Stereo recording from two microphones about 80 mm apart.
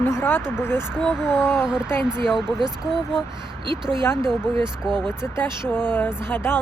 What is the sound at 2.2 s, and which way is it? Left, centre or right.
Speech, centre.